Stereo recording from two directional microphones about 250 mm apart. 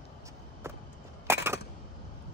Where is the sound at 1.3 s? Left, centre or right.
Centre.